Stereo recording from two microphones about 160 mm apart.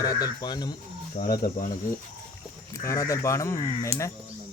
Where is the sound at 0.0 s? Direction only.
25° left (ahead or behind).